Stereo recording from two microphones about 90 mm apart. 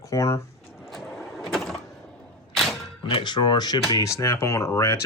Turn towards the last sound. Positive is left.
turn(degrees=30)  # may be behind; listen again after turning